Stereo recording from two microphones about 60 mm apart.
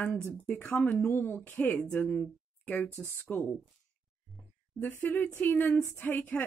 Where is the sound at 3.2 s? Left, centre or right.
Left.